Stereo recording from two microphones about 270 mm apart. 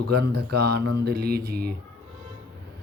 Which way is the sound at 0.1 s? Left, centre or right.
Right.